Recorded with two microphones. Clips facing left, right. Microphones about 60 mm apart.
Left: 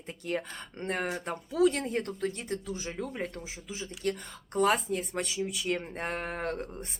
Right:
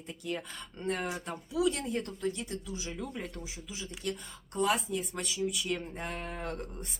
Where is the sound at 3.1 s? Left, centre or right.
Left.